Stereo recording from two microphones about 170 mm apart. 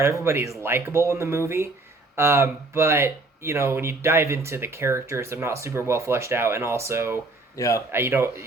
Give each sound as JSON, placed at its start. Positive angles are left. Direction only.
{"t": 0.0, "sound": "speech", "side_deg": -15}
{"t": 7.5, "sound": "a man's voice", "side_deg": 20}
{"t": 7.9, "sound": "speech", "side_deg": -15}